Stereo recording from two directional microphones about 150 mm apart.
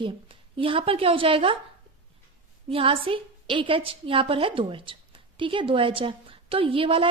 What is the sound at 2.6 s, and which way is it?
A woman's voice, 40° right (ahead or behind).